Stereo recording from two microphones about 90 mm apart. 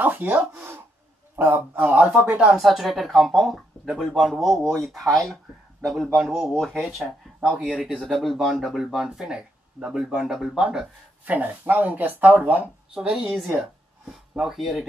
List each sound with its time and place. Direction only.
0.0 s a sound: 20° right (ahead or behind)
1.3 s a man's voice: 25° right (ahead or behind)
2.5 s speech: centre (ahead or behind)